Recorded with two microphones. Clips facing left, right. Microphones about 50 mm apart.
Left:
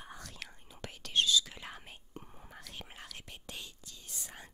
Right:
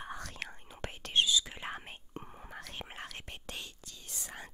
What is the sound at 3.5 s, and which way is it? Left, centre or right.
Whispering, right.